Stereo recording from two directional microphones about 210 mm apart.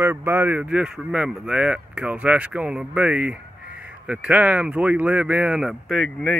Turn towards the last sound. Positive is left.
turn(degrees=0)  # may be behind; listen again after turning